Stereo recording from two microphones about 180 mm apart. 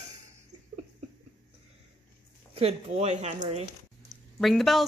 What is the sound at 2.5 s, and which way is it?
A woman's voice, 35° right (ahead or behind).